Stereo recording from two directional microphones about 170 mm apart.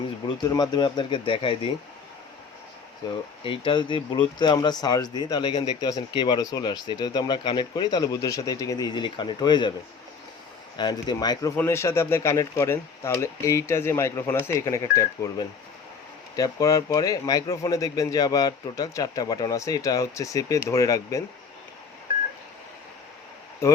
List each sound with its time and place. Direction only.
0.4 s speech: 20° left (ahead or behind)
3.0 s speech: 25° left (ahead or behind)
10.8 s speech: 25° left (ahead or behind)
23.6 s speech: 15° left (ahead or behind)